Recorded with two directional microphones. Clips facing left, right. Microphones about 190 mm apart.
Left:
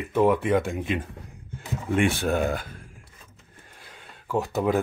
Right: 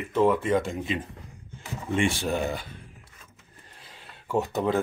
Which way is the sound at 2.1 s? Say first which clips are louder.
Left 3 dB; 55° left (ahead or behind).